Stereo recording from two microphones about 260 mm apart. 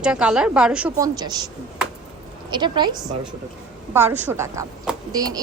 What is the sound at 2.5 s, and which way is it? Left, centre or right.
Speech, centre.